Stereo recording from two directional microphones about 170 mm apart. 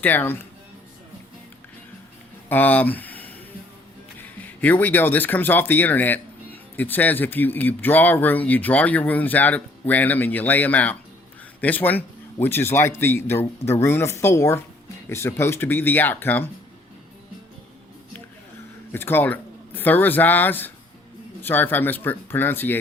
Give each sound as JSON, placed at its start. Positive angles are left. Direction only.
{"t": 0.0, "sound": "speech", "side_deg": 10}
{"t": 2.5, "sound": "speech", "side_deg": 10}
{"t": 4.6, "sound": "speech", "side_deg": 10}
{"t": 18.9, "sound": "speech", "side_deg": 15}